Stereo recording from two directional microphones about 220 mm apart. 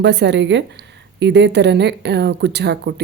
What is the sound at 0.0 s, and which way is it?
Speech, 50° right (ahead or behind).